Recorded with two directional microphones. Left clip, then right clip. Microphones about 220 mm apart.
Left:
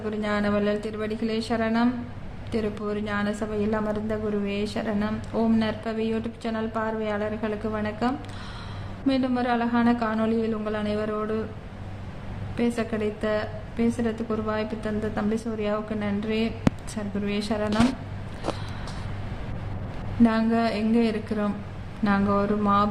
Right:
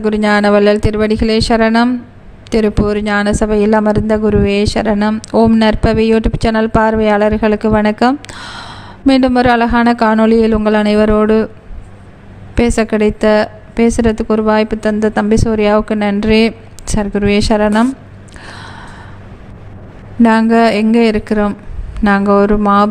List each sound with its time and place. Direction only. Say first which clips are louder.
0.0 s a woman's voice: right 15 dB; 45° right (ahead or behind)
12.5 s a woman's voice: right 14 dB; 50° right (ahead or behind)
20.2 s a woman's voice: right 14 dB; 50° right (ahead or behind)